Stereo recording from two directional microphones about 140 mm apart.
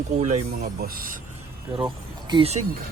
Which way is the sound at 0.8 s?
90° right.